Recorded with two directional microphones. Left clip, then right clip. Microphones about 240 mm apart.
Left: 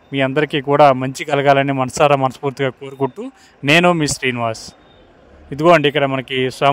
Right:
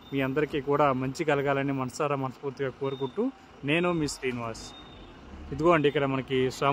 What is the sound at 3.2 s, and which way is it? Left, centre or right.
Speech, centre.